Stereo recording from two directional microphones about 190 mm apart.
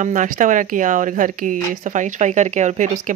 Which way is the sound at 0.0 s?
40° right (ahead or behind).